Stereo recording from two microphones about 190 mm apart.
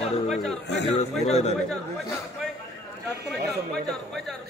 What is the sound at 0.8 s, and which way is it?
Speech, 35° left (ahead or behind).